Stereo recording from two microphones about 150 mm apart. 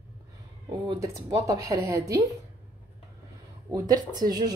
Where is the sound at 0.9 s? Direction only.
20° right (ahead or behind).